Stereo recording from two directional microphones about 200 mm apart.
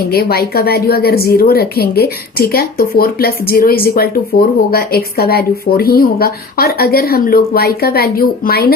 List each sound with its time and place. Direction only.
0.1 s a woman's voice: 50° left (ahead or behind)